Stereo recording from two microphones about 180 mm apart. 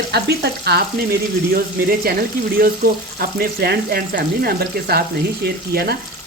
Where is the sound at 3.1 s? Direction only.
60° right (ahead or behind).